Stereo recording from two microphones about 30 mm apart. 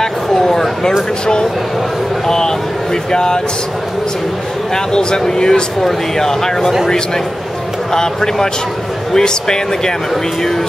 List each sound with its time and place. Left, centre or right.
0.0 s a sound: centre
1.2 s speech: left
4.7 s speech: left
7.9 s speech: centre